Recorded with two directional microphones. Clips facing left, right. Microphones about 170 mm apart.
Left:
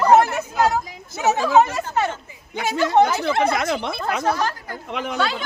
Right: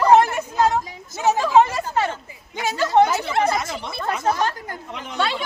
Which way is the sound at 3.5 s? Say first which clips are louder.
Left 4 dB; 70° left (ahead or behind).